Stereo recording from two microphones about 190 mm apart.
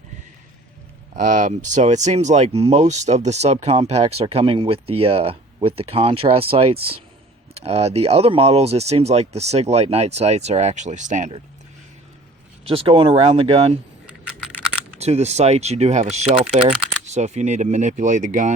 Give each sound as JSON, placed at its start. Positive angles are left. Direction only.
{"t": 1.1, "sound": "speech", "side_deg": -45}
{"t": 12.6, "sound": "speech", "side_deg": -30}
{"t": 14.9, "sound": "speech", "side_deg": -35}